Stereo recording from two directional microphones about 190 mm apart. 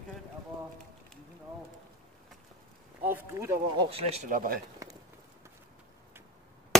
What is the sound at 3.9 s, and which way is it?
Speech, 30° right (ahead or behind).